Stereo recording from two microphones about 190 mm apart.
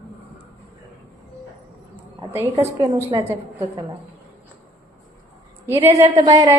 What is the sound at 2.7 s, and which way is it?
Speech, 20° right (ahead or behind).